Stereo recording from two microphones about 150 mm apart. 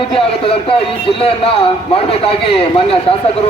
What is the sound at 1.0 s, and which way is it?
A man's voice, 40° left (ahead or behind).